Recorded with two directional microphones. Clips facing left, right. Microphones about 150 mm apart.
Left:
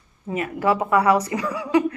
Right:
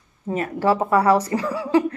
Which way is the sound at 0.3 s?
35° right (ahead or behind).